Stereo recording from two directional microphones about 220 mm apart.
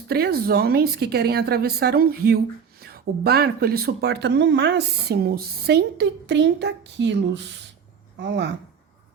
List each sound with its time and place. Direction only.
0.1 s speech: 45° right (ahead or behind)